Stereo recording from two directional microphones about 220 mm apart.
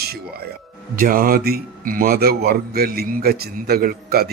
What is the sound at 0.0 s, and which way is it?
Speech, 45° right (ahead or behind).